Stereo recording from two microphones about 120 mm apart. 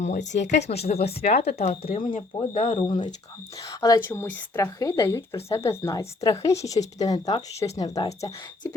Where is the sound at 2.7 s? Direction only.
45° left (ahead or behind).